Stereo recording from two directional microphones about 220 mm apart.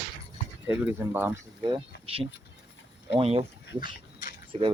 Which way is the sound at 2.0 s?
25° right (ahead or behind).